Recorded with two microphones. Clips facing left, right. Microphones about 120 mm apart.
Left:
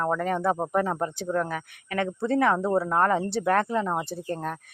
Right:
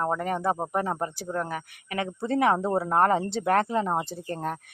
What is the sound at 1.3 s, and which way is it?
Speech, 20° right (ahead or behind).